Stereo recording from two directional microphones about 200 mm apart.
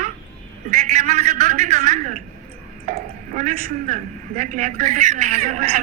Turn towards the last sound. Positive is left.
turn(degrees=-40)  # may be behind; listen again after turning